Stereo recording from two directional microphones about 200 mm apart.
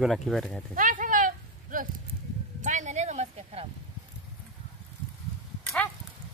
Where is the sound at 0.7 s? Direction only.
40° right (ahead or behind).